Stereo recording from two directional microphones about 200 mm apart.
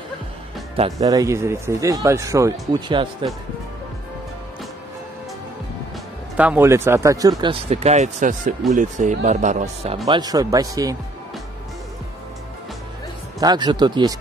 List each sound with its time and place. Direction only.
0.9 s speech: 15° right (ahead or behind)
6.3 s speech: 5° right (ahead or behind)
7.6 s speech: 30° right (ahead or behind)
10.0 s speech: 20° right (ahead or behind)
13.4 s speech: 20° right (ahead or behind)